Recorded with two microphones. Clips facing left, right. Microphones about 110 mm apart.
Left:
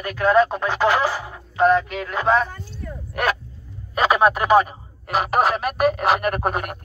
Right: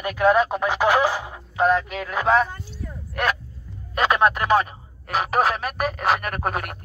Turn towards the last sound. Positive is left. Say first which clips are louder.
# left 4 dB
turn(degrees=0)  # may be behind; listen again after turning